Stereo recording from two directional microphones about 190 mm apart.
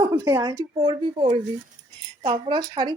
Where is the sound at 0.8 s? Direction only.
30° right (ahead or behind).